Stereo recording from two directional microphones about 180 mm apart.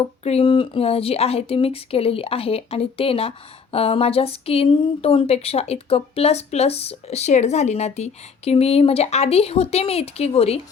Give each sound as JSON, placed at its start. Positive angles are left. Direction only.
{"t": 0.3, "sound": "speech", "side_deg": 30}